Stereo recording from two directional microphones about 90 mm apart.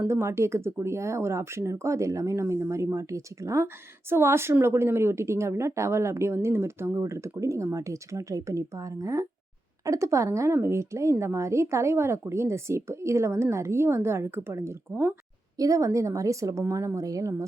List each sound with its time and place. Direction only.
0.1 s a woman's voice: 30° right (ahead or behind)
15.5 s a woman's voice: 40° right (ahead or behind)